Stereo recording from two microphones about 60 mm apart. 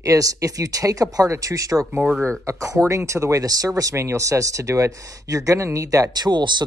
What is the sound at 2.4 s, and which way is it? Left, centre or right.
Speech, right.